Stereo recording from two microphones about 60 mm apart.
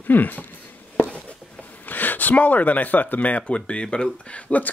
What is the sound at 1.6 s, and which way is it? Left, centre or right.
Speech, left.